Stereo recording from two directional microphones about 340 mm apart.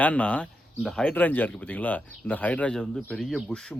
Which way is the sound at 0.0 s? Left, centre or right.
Centre.